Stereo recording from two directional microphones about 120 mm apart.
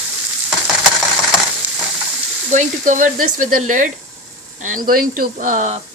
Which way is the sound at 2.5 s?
90° right.